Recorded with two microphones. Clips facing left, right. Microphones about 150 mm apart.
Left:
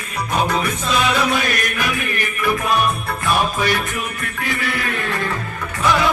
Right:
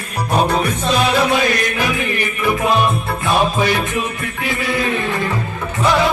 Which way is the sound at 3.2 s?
25° right (ahead or behind).